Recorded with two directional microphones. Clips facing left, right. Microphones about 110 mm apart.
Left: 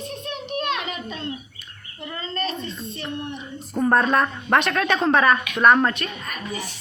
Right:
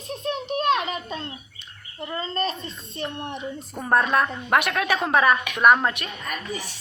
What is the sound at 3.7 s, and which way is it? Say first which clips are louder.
A woman's voice: left 2 dB; 5° right (ahead or behind).